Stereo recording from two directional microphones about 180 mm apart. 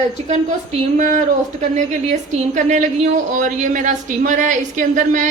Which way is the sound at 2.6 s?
40° right (ahead or behind).